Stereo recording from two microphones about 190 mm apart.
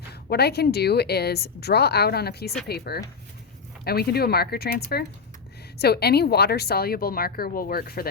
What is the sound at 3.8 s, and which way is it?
A woman's voice, 55° left (ahead or behind).